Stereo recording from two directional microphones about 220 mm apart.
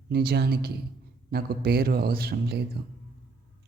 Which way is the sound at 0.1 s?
45° right (ahead or behind).